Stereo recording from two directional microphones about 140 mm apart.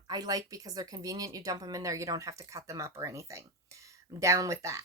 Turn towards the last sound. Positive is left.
turn(degrees=-20)  # may be behind; listen again after turning